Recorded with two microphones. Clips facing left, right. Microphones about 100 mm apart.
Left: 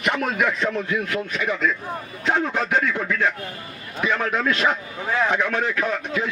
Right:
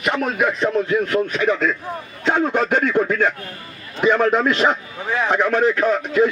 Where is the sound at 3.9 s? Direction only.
35° right (ahead or behind).